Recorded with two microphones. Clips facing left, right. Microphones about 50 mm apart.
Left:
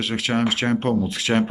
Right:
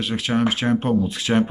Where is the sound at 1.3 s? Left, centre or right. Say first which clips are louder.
Right 1 dB; left.